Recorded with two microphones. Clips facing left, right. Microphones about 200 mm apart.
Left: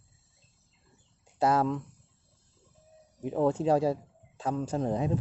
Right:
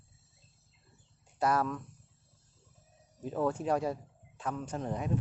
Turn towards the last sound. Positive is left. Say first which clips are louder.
# left 7 dB
turn(degrees=30)  # may be behind; listen again after turning